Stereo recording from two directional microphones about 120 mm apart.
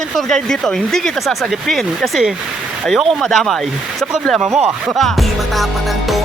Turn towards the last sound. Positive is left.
turn(degrees=0)  # may be behind; listen again after turning